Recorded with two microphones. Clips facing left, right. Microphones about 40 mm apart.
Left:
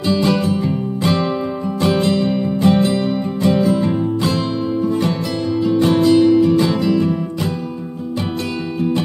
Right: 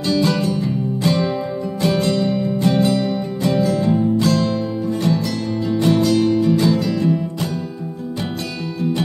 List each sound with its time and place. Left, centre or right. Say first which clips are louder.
0.0 s music: left 2 dB; left
6.9 s music: left 2 dB; centre